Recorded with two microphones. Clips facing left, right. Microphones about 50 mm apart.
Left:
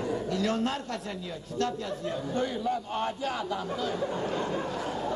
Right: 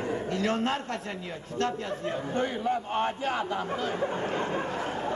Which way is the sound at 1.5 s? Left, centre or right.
Right.